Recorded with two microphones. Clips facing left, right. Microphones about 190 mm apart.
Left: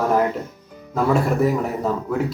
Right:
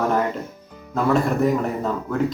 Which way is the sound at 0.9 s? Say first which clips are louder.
Even; 5° left (ahead or behind).